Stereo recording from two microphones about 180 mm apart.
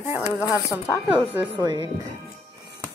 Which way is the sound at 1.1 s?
10° right (ahead or behind).